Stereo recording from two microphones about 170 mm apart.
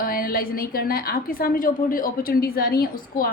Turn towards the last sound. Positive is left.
turn(degrees=60)  # may be behind; listen again after turning